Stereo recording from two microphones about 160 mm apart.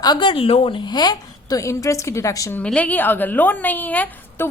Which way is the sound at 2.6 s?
10° left (ahead or behind).